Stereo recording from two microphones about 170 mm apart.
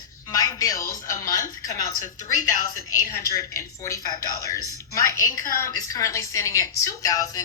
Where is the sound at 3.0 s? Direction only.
20° left (ahead or behind).